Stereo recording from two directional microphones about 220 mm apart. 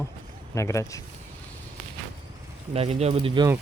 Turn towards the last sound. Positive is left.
turn(degrees=-20)  # may be behind; listen again after turning